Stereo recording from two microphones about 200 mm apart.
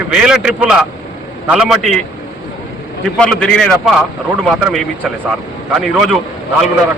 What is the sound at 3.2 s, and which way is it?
A man's voice, 5° left (ahead or behind).